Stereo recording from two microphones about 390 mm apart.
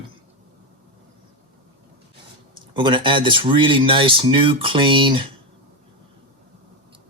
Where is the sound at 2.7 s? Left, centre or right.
Centre.